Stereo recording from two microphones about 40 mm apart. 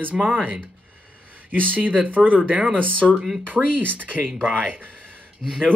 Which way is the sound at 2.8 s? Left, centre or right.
Right.